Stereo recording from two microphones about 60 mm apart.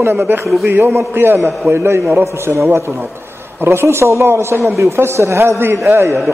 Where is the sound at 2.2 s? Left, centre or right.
Right.